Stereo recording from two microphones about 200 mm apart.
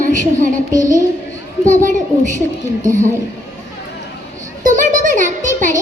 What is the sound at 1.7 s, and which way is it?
Speech, 40° right (ahead or behind).